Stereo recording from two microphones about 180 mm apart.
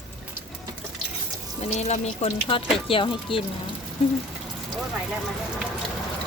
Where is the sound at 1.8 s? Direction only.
35° left (ahead or behind).